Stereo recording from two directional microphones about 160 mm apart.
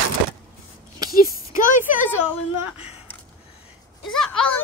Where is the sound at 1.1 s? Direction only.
65° left (ahead or behind).